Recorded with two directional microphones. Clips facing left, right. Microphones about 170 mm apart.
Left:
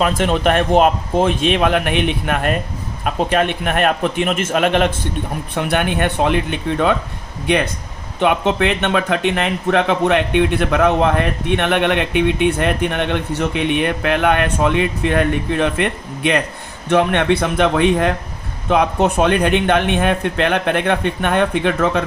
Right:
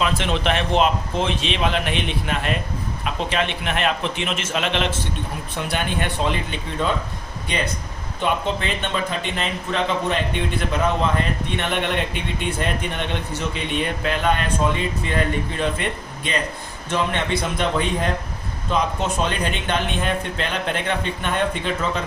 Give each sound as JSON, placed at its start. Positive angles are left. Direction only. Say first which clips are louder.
{"t": 0.0, "sound": "a man's voice", "louder": "left 6 dB", "side_deg": 50}
{"t": 8.2, "sound": "speech", "louder": "left 7 dB", "side_deg": 70}